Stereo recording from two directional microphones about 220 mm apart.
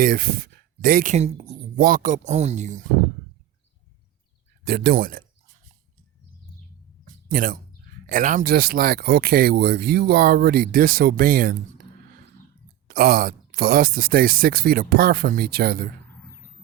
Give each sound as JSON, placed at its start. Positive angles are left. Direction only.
{"t": 0.0, "sound": "speech", "side_deg": -40}
{"t": 4.6, "sound": "speech", "side_deg": -45}
{"t": 7.3, "sound": "speech", "side_deg": -40}
{"t": 12.9, "sound": "speech", "side_deg": -40}